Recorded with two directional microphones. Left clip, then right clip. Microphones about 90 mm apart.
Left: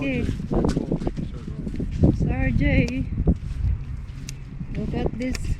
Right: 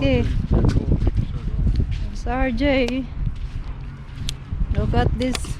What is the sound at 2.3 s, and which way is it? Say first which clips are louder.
Speech: right 5 dB; 35° left (ahead or behind).